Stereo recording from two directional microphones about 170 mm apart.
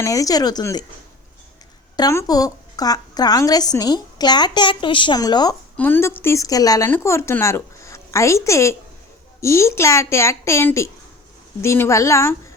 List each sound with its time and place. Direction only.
0.0 s a woman's voice: 20° left (ahead or behind)
2.0 s a woman's voice: 20° left (ahead or behind)
5.7 s speech: 10° left (ahead or behind)